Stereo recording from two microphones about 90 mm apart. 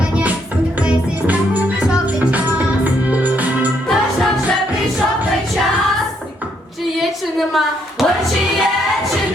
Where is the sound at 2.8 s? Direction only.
15° right (ahead or behind).